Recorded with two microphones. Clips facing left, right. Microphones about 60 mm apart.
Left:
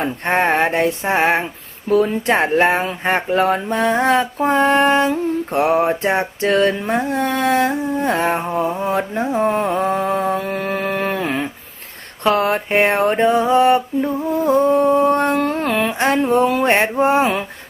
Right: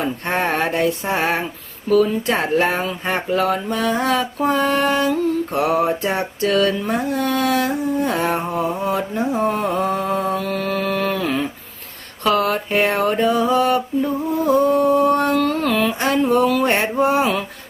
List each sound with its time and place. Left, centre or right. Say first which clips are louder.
0.0 s mantra: left 3 dB; left
1.9 s speech: left 1 dB; left
8.4 s a sound: left 2 dB; centre
8.8 s mantra: left 1 dB; left